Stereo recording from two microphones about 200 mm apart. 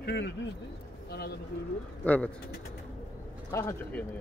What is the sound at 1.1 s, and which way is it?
Speech, 55° left (ahead or behind).